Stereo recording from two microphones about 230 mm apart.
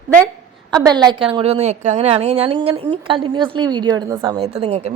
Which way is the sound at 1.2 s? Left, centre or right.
Right.